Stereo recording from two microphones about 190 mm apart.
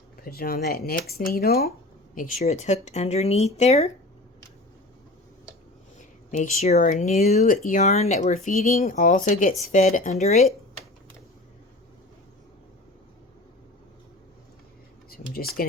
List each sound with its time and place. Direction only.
0.2 s speech: 55° left (ahead or behind)
2.1 s speech: 40° left (ahead or behind)
6.3 s speech: 40° left (ahead or behind)
8.4 s speech: 50° left (ahead or behind)
15.1 s a sound: 50° left (ahead or behind)